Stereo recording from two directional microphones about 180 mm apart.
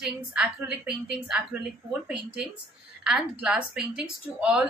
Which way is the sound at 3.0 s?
5° right (ahead or behind).